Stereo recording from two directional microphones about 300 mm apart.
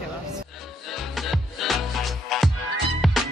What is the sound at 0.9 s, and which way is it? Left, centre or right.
Music, centre.